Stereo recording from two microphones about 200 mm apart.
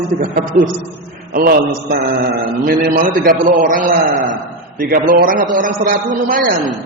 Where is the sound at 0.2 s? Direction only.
45° right (ahead or behind).